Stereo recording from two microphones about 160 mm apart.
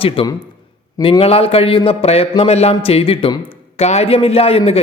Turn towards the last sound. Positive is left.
turn(degrees=40)  # may be behind; listen again after turning